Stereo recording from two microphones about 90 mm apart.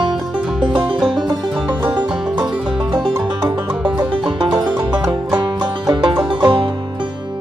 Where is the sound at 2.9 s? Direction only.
55° right (ahead or behind).